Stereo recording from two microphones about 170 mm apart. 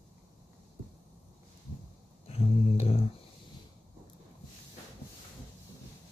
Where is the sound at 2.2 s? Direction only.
35° left (ahead or behind).